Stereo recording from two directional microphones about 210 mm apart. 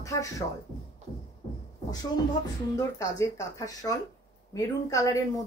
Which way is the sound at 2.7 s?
15° left (ahead or behind).